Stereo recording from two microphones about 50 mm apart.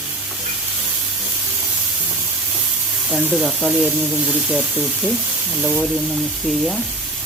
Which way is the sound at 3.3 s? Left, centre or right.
Centre.